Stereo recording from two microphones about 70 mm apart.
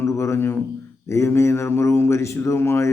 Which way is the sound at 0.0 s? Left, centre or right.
Left.